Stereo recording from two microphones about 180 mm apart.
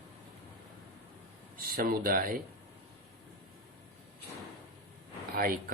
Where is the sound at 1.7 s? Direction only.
55° right (ahead or behind).